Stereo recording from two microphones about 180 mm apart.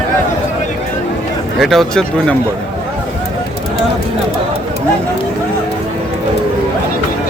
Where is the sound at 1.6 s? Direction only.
Centre (ahead or behind).